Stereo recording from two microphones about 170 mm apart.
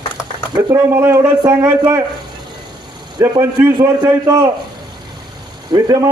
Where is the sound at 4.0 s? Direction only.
25° right (ahead or behind).